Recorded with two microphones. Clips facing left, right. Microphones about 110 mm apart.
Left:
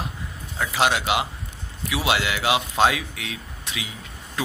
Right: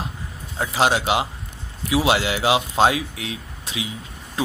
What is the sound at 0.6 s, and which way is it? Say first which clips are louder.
A man's voice: right 2 dB; 30° right (ahead or behind).